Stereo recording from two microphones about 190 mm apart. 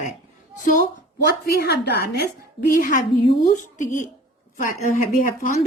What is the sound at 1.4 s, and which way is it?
Speech, 60° left (ahead or behind).